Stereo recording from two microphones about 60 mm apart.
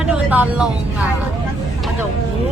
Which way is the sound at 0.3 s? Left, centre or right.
Right.